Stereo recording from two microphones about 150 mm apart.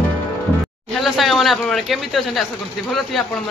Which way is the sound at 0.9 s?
Centre (ahead or behind).